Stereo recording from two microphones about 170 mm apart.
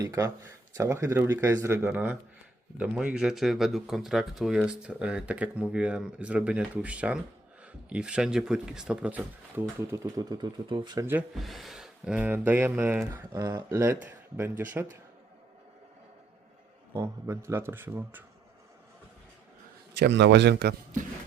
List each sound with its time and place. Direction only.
0.0 s speech: 20° right (ahead or behind)
11.3 s speech: centre (ahead or behind)
16.9 s speech: 15° right (ahead or behind)
20.0 s a man's voice: 90° right